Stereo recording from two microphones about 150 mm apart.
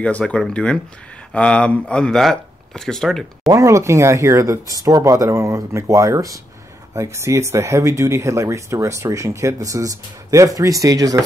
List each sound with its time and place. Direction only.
0.0 s speech: 5° left (ahead or behind)
3.4 s speech: 20° right (ahead or behind)